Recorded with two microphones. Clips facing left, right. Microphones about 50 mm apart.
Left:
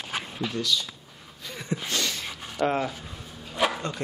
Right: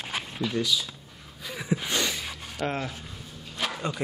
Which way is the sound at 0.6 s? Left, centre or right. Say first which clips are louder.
Right 1 dB; centre.